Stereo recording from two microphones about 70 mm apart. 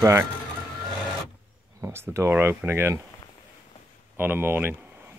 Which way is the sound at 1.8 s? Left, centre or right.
Right.